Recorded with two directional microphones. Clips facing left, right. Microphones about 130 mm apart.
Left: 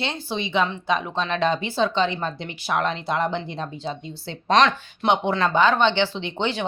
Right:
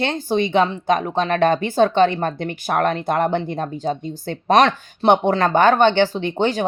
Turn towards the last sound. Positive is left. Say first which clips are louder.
# right 6 dB
turn(degrees=-45)  # may be behind; listen again after turning